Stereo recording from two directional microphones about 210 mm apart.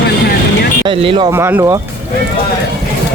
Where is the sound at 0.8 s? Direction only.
25° right (ahead or behind).